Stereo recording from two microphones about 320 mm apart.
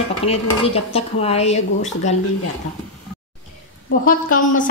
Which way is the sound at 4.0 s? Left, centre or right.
Left.